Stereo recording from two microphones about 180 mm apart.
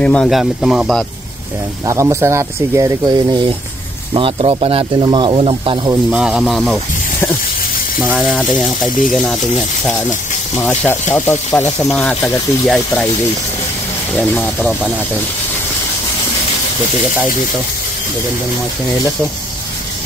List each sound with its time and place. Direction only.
0.0 s speech: 5° left (ahead or behind)
1.9 s speech: 15° right (ahead or behind); by 5.8 s 30° right (ahead or behind)
6.0 s speech: 5° right (ahead or behind)
8.2 s speech: centre (ahead or behind)
10.6 s speech: 5° left (ahead or behind)
14.2 s speech: 10° left (ahead or behind)
14.6 s speech: 5° right (ahead or behind)